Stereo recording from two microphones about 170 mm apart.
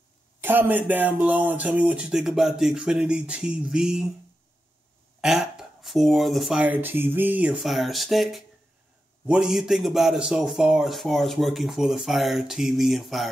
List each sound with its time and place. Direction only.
0.4 s speech: 10° right (ahead or behind)
5.2 s a man's voice: 5° right (ahead or behind)